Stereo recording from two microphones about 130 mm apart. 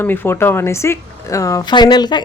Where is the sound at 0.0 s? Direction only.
15° left (ahead or behind).